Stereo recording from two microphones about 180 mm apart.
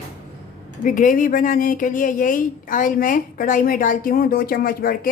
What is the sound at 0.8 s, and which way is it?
Speech, 45° left (ahead or behind).